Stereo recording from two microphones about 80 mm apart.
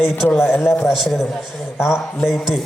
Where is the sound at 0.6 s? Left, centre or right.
Centre.